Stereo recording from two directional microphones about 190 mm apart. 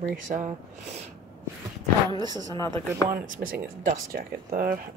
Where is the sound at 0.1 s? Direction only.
45° right (ahead or behind).